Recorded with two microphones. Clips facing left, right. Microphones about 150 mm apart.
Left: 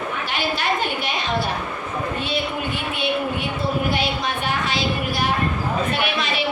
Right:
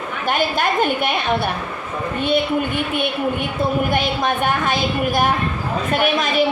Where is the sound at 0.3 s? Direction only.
50° right (ahead or behind).